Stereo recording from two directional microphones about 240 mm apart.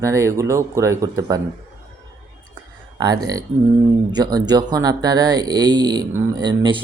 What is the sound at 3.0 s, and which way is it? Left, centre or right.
Speech, centre.